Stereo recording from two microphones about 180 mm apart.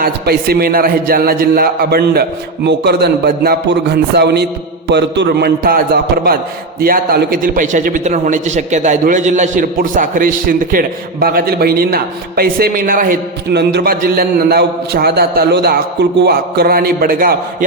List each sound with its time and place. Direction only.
0.0 s a man's voice: 60° right (ahead or behind)